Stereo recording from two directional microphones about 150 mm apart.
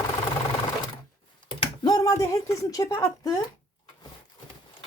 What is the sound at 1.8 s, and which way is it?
A woman's voice, 20° left (ahead or behind).